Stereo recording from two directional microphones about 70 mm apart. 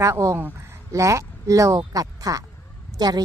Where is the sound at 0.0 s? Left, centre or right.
Right.